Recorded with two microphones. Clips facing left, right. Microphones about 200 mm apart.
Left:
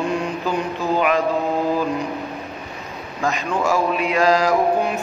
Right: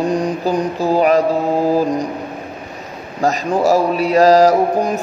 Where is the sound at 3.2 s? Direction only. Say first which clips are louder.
Right 6 dB; 40° right (ahead or behind).